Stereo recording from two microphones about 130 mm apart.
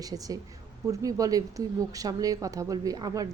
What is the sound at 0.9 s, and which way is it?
Speech, 25° right (ahead or behind).